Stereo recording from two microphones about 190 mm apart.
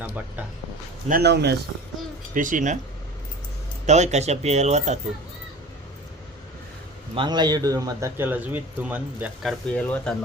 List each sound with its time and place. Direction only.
1.0 s speech: 55° right (ahead or behind)
2.3 s speech: 45° right (ahead or behind)
3.8 s speech: 35° right (ahead or behind)
7.2 s speech: 20° right (ahead or behind); by 10.2 s 5° left (ahead or behind)